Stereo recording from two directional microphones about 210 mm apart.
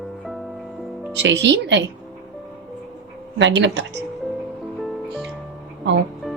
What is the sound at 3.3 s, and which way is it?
Speech, 60° right (ahead or behind).